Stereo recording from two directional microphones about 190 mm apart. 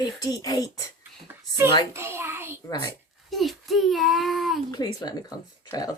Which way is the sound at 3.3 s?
Centre (ahead or behind).